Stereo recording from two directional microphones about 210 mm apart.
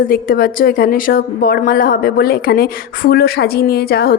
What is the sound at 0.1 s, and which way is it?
A woman's voice, 45° left (ahead or behind).